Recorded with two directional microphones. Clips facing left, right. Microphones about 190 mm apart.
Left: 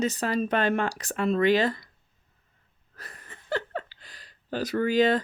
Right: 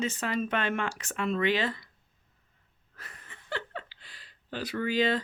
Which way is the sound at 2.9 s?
40° left (ahead or behind).